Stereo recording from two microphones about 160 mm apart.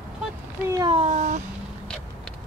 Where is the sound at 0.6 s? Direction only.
20° right (ahead or behind).